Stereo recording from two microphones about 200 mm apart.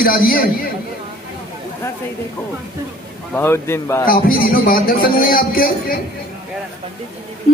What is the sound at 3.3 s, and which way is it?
Speech, 10° left (ahead or behind).